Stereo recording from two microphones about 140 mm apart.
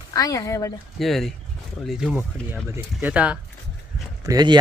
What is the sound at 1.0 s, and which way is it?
Speech, centre (ahead or behind).